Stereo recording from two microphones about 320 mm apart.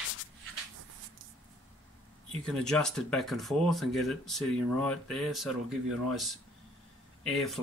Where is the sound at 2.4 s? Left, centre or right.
Centre.